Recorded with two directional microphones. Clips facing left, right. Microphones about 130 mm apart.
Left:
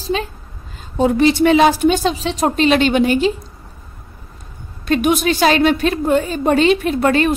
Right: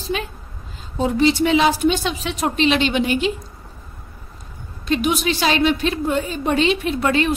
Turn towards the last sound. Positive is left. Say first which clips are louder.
# left 4 dB
turn(degrees=45)  # may be behind; listen again after turning